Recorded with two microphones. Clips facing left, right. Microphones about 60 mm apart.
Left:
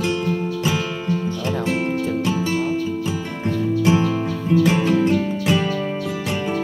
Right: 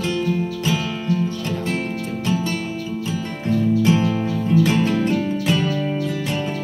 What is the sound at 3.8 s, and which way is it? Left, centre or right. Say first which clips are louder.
Music: even; centre.